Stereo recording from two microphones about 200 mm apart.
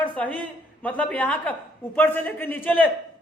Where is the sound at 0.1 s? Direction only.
5° left (ahead or behind).